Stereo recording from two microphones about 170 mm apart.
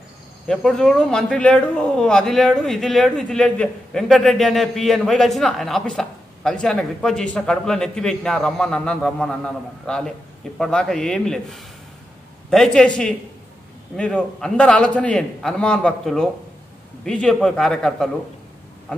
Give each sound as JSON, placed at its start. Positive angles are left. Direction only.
{"t": 0.5, "sound": "speech", "side_deg": 5}